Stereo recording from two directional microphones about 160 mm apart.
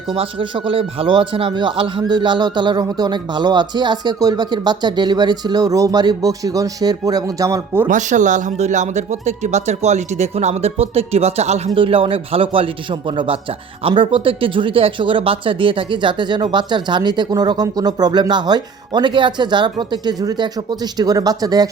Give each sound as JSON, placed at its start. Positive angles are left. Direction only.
{"t": 0.1, "sound": "speech", "side_deg": -30}
{"t": 7.9, "sound": "speech", "side_deg": -50}